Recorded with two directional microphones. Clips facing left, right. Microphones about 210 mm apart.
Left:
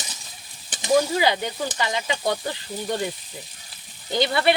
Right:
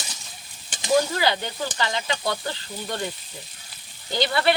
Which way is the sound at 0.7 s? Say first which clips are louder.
Left 1 dB; 20° left (ahead or behind).